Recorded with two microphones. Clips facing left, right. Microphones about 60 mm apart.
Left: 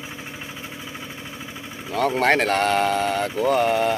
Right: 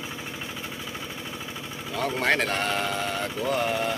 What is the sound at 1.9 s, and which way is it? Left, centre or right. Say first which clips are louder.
Speech: left 6 dB; left.